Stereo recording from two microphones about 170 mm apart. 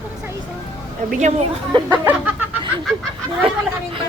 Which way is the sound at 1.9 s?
10° right (ahead or behind).